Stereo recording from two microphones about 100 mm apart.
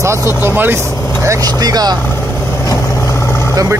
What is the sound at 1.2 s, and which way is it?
Speech, 40° right (ahead or behind).